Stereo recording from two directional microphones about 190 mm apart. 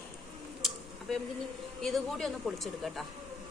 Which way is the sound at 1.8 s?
Centre (ahead or behind).